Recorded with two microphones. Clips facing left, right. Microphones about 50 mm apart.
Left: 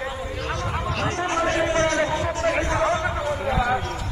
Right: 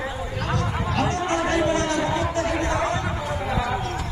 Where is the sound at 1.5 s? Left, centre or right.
Left.